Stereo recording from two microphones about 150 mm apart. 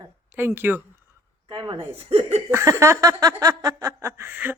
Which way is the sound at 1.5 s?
30° right (ahead or behind).